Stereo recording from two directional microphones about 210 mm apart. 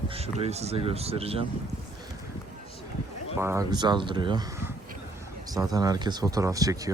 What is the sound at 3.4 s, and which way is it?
Speech, 15° right (ahead or behind).